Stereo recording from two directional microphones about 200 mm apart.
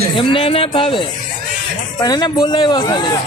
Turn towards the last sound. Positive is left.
turn(degrees=20)  # may be behind; listen again after turning